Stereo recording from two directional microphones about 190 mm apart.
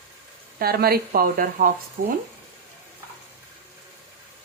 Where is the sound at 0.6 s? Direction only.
55° right (ahead or behind).